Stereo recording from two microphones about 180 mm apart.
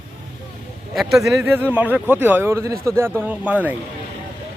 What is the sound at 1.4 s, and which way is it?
Speech, 10° right (ahead or behind).